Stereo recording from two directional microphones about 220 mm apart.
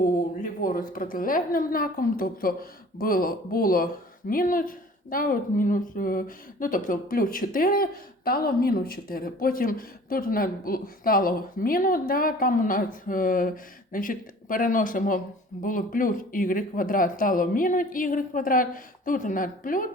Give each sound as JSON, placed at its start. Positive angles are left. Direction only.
{"t": 0.6, "sound": "a woman's voice", "side_deg": 40}